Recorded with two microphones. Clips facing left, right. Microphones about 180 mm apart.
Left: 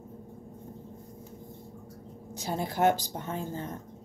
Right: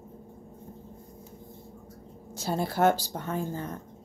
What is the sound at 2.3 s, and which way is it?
Speech, 15° left (ahead or behind).